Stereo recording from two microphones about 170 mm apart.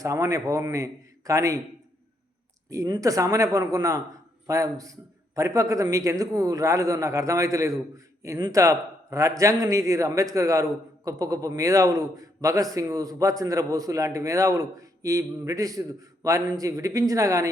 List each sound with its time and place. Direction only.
0.0 s a man's voice: 20° right (ahead or behind)
2.6 s a man's voice: 20° right (ahead or behind)